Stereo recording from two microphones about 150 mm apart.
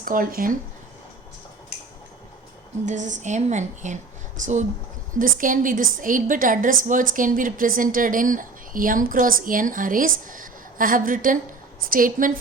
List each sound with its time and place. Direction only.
0.0 s speech: 70° right (ahead or behind)
2.8 s speech: 55° right (ahead or behind)
5.2 s a woman's voice: 65° right (ahead or behind)